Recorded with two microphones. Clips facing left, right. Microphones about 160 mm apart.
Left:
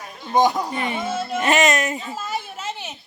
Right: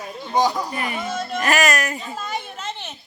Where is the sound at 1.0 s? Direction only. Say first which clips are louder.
Left 2 dB; 5° left (ahead or behind).